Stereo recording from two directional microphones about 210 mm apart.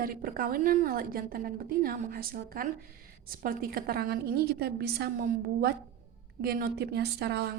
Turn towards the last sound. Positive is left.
turn(degrees=-50)  # may be behind; listen again after turning